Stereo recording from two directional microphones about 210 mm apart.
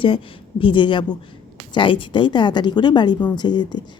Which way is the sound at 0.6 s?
25° left (ahead or behind).